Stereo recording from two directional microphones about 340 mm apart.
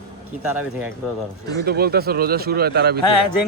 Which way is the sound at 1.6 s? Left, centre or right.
Right.